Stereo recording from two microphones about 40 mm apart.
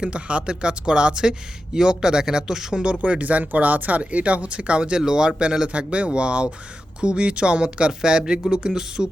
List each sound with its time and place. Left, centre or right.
0.0 s speech: right; by 2.8 s centre
2.8 s speech: right